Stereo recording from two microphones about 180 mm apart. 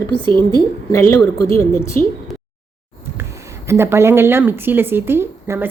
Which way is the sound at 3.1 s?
15° right (ahead or behind).